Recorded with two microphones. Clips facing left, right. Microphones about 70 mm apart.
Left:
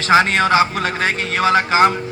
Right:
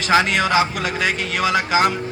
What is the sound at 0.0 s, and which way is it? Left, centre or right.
A man's voice, left.